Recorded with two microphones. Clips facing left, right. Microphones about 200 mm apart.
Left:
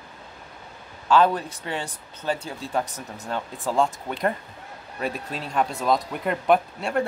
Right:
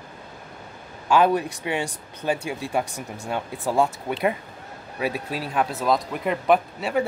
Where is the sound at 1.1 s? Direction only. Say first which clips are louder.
Right 1 dB; 15° right (ahead or behind).